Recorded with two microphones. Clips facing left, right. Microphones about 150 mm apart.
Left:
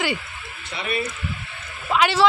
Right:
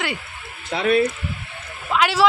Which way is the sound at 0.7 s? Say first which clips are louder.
Right 9 dB; 90° right.